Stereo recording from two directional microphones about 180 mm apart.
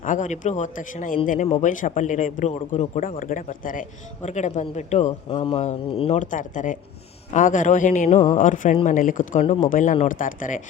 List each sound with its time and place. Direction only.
0.0 s a man's voice: 45° left (ahead or behind)
5.3 s a man's voice: 30° left (ahead or behind); by 10.6 s 45° left (ahead or behind)